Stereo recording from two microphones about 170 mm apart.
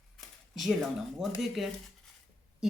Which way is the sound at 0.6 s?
Centre (ahead or behind).